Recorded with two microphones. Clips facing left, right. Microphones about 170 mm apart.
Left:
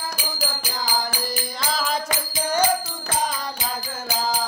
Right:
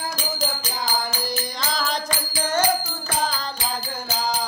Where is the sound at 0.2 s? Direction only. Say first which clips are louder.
Right 2 dB; 10° left (ahead or behind).